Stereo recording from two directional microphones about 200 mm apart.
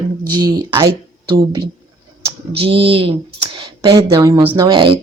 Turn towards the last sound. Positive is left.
turn(degrees=-20)  # may be behind; listen again after turning